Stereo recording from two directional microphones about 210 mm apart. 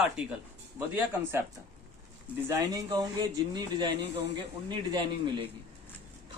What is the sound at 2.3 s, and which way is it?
A man's voice, 15° right (ahead or behind).